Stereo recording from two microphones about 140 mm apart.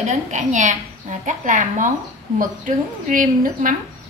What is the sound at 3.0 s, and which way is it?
Speech, 75° right (ahead or behind).